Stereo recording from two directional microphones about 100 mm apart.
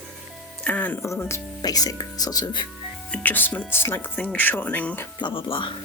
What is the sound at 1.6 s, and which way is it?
Speech, 40° left (ahead or behind).